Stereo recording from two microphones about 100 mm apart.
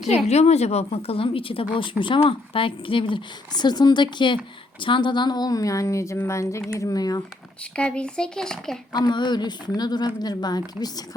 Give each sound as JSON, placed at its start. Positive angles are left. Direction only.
{"t": 0.3, "sound": "a woman's voice", "side_deg": 90}
{"t": 3.5, "sound": "a woman's voice", "side_deg": 45}
{"t": 7.8, "sound": "speech", "side_deg": 10}
{"t": 8.9, "sound": "a woman's voice", "side_deg": 45}